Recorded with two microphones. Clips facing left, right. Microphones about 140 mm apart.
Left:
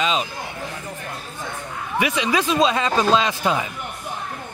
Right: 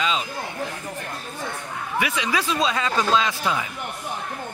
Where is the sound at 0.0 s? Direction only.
20° left (ahead or behind).